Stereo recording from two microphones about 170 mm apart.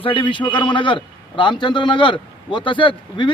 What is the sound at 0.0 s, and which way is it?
A man's voice, 30° left (ahead or behind).